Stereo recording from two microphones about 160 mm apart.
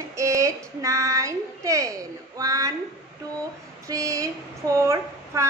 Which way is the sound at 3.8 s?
20° right (ahead or behind).